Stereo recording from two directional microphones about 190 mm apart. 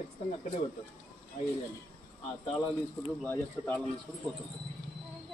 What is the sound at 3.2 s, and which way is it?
Speech, 10° left (ahead or behind).